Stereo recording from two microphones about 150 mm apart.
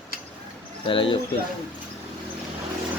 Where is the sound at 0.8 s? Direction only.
35° left (ahead or behind).